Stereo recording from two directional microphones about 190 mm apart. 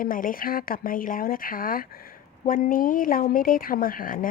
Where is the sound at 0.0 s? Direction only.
45° left (ahead or behind).